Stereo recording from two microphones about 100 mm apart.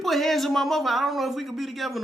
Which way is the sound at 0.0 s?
Centre (ahead or behind).